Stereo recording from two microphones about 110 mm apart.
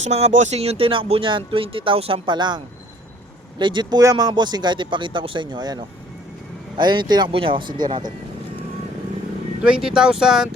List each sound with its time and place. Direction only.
0.0 s speech: 80° right; by 2.6 s 45° right (ahead or behind)
3.6 s speech: 45° right (ahead or behind)
9.6 s speech: 5° right (ahead or behind)